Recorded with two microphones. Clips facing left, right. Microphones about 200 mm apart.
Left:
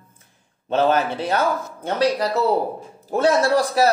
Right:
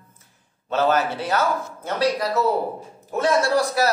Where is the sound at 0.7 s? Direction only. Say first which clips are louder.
Left 2 dB; 30° left (ahead or behind).